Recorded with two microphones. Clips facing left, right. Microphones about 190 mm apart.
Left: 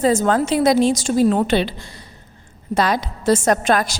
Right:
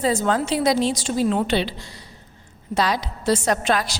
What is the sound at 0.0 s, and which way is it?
A woman's voice, 45° left (ahead or behind).